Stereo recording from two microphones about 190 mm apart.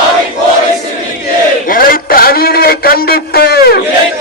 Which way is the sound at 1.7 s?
50° left (ahead or behind).